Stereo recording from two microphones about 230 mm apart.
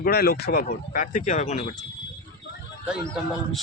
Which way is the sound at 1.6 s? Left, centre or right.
Centre.